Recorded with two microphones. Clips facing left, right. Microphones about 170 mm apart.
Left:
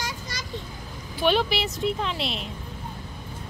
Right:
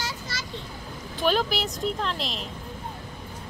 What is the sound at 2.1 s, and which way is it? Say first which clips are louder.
Speech: left 2 dB; 40° right (ahead or behind).